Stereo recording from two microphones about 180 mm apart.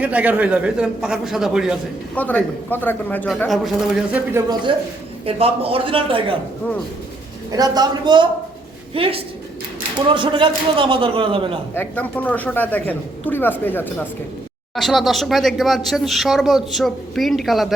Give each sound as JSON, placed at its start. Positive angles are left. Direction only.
{"t": 0.0, "sound": "speech", "side_deg": -10}
{"t": 2.1, "sound": "speech", "side_deg": 10}
{"t": 5.2, "sound": "a man's voice", "side_deg": -30}
{"t": 7.5, "sound": "a man's voice", "side_deg": -20}
{"t": 11.7, "sound": "speech", "side_deg": 10}